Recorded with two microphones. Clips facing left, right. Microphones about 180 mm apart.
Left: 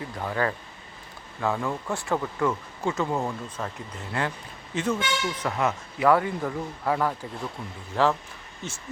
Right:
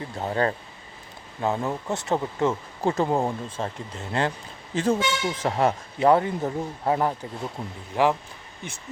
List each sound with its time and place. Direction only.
0.2 s speech: 30° right (ahead or behind)